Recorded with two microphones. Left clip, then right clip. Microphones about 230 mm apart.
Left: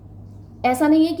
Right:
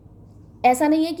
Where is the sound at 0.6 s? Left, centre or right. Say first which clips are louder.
Left 1 dB; right.